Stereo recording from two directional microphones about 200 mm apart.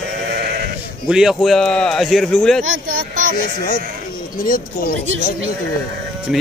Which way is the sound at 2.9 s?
45° right (ahead or behind).